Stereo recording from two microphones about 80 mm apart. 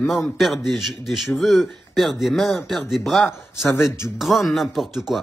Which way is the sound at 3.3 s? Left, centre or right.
Left.